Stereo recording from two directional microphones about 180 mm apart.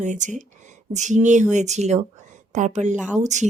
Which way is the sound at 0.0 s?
45° right (ahead or behind).